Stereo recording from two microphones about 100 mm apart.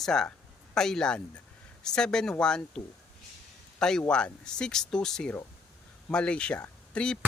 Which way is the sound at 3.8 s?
5° left (ahead or behind).